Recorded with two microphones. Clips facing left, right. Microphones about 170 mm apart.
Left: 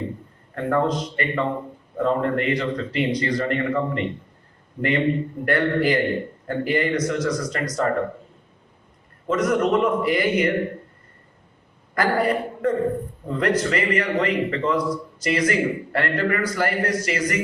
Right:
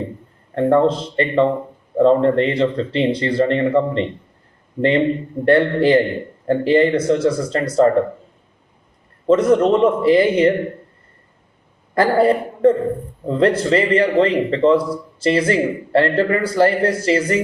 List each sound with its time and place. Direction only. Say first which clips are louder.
0.5 s a man's voice: right 7 dB; 30° right (ahead or behind)
9.2 s a man's voice: right 7 dB; 30° right (ahead or behind)
11.9 s a man's voice: right 6 dB; 30° right (ahead or behind)